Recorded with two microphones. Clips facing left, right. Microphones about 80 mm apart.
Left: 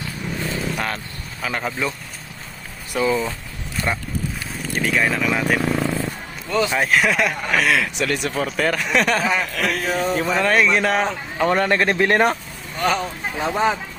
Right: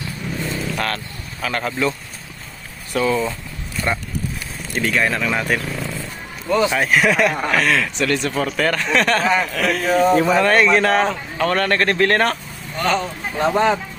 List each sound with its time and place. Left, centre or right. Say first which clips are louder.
0.8 s speech: right 2 dB; centre
2.9 s speech: right 1 dB; centre
5.7 s vehicle: left 5 dB; left
6.5 s speech: right 3 dB; centre
6.7 s speech: right 2 dB; centre
11.3 s speech: left 1 dB; centre